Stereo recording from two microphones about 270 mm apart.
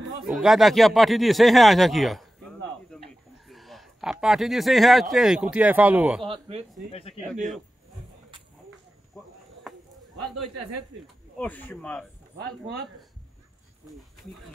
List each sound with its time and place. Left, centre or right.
0.2 s speech: centre
6.2 s speech: centre
6.9 s speech: left
8.6 s a sound: centre
10.2 s speech: centre